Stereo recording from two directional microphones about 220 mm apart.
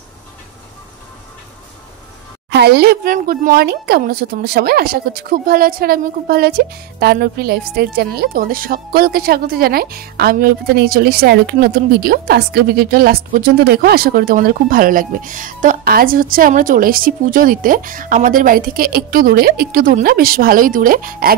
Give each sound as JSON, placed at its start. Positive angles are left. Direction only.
{"t": 2.5, "sound": "speech", "side_deg": -50}